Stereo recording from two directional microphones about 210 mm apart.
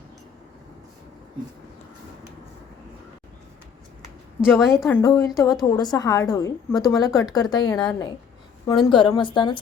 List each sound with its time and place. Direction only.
4.4 s a woman's voice: 5° right (ahead or behind)
4.9 s a woman's voice: 15° left (ahead or behind)
7.8 s a woman's voice: 5° left (ahead or behind)
8.6 s a woman's voice: 20° left (ahead or behind)